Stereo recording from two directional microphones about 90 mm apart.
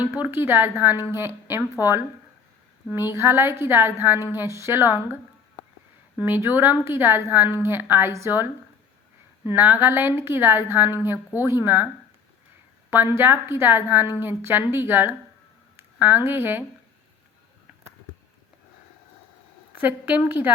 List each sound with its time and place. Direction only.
0.1 s a woman's voice: 25° right (ahead or behind)
12.9 s a woman's voice: 25° right (ahead or behind)
19.7 s a woman's voice: 20° right (ahead or behind)